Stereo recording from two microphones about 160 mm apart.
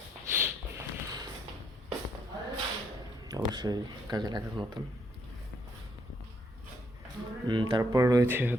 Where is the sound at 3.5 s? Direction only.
25° right (ahead or behind).